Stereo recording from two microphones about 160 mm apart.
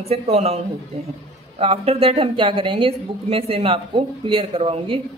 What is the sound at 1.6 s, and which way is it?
A woman's voice, 40° right (ahead or behind).